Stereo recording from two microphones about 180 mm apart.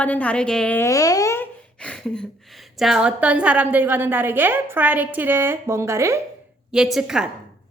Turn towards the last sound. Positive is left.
turn(degrees=-5)  # may be behind; listen again after turning